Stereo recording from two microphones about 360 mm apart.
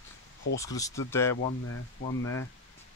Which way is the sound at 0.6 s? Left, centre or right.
Centre.